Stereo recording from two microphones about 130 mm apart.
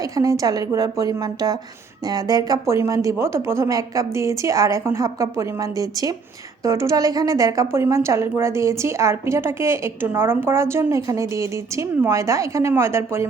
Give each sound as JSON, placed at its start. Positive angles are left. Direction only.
{"t": 0.2, "sound": "a woman's voice", "side_deg": -25}